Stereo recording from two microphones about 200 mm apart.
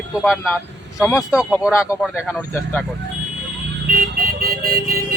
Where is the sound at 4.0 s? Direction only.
45° right (ahead or behind).